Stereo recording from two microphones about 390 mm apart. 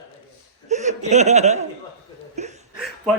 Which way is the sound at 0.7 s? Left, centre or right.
Centre.